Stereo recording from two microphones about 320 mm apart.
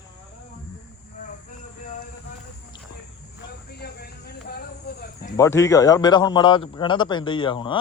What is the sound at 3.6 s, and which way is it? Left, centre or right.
Cricket, left.